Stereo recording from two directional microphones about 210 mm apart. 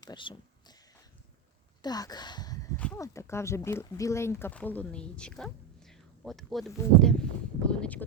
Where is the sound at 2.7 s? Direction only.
10° left (ahead or behind).